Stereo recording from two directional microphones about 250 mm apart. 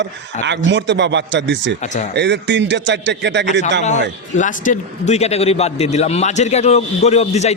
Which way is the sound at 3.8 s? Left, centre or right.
Left.